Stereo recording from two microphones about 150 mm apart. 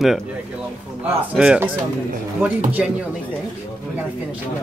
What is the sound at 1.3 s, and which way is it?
Speech, 5° right (ahead or behind).